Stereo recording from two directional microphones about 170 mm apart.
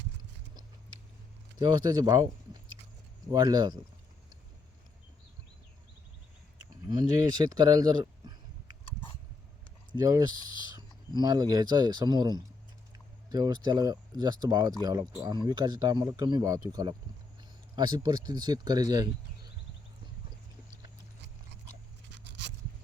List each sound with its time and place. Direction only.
1.5 s speech: 25° right (ahead or behind)
6.9 s speech: 20° right (ahead or behind)
9.9 s speech: 20° right (ahead or behind)
22.1 s a sound: 90° right